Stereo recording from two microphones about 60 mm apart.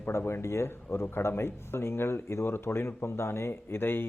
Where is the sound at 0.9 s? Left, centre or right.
Left.